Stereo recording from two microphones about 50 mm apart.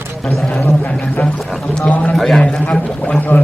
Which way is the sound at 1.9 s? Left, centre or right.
Left.